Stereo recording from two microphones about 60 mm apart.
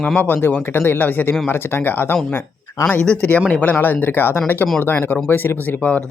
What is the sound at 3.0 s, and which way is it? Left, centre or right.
Speech, centre.